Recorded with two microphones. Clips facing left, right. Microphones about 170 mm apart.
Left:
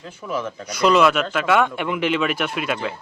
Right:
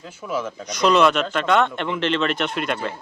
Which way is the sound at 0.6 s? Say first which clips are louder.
Left 1 dB; 10° left (ahead or behind).